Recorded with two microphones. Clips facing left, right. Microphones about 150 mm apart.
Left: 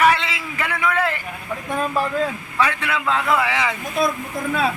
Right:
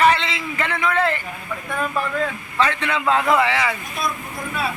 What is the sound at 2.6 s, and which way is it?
Speech, 10° left (ahead or behind).